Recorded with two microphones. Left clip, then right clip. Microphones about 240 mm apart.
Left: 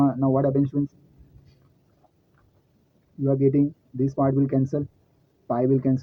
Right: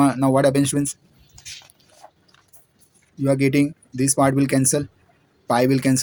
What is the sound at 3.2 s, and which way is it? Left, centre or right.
Speech, right.